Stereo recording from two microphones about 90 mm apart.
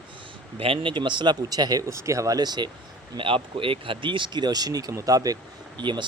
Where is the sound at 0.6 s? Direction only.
80° right; by 2.6 s 50° right (ahead or behind).